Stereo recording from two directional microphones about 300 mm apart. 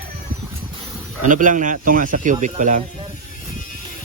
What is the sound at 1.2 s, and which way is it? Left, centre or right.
Speech, right.